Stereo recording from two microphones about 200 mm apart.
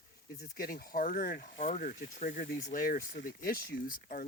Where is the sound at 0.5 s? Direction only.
50° left (ahead or behind).